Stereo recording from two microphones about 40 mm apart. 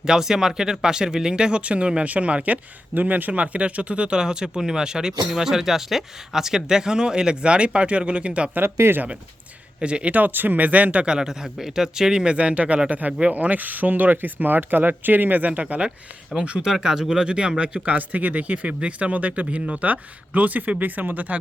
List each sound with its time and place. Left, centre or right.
0.0 s speech: centre
8.6 s speech: right
9.8 s speech: right
10.2 s speech: right
11.0 s speech: right
11.3 s speech: centre
12.4 s speech: right
16.3 s speech: right
16.7 s speech: centre
17.8 s speech: right